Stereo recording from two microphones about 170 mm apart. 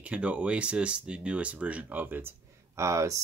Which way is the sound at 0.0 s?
5° right (ahead or behind).